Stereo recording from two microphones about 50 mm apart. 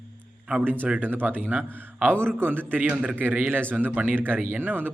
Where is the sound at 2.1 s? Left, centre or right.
Right.